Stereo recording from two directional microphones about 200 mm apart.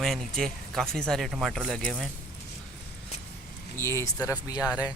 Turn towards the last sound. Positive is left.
turn(degrees=-5)  # may be behind; listen again after turning